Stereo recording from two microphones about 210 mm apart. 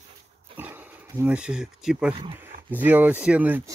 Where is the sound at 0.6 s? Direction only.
10° right (ahead or behind).